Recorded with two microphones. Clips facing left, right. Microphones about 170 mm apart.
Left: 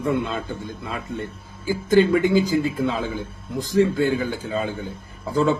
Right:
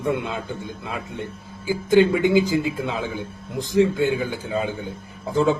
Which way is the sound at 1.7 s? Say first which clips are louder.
Even; 15° right (ahead or behind).